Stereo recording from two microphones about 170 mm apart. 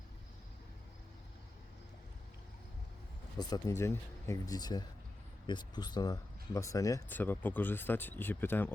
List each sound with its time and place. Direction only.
3.3 s speech: 20° left (ahead or behind)